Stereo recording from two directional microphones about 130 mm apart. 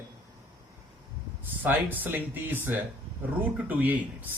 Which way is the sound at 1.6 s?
15° right (ahead or behind).